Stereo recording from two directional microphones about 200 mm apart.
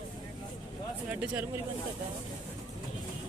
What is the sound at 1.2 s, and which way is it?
Speech, 5° right (ahead or behind).